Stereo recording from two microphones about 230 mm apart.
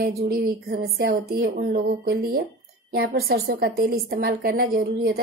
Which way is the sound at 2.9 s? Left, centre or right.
Right.